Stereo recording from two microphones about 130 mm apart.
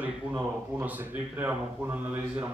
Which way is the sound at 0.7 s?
15° right (ahead or behind).